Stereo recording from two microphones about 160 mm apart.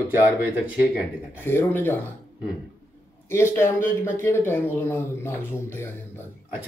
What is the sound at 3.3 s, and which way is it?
Speech, 15° left (ahead or behind).